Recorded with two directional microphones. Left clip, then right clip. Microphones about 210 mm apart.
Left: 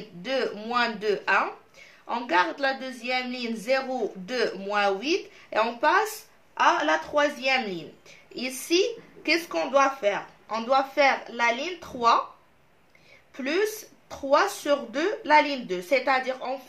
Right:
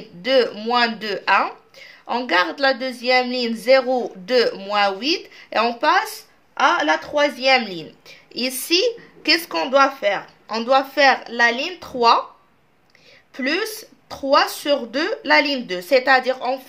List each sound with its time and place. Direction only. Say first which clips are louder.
0.2 s speech: right 10 dB; 50° right (ahead or behind)
6.6 s a woman's voice: right 5 dB; 5° right (ahead or behind)
6.9 s speech: right 5 dB; 55° right (ahead or behind)
13.3 s speech: right 4 dB; 55° right (ahead or behind)